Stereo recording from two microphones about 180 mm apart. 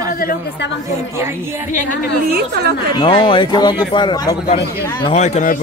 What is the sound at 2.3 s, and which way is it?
Speech, 65° right (ahead or behind).